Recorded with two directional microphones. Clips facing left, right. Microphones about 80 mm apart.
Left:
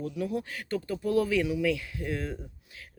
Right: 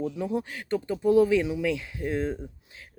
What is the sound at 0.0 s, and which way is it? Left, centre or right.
Speech, right.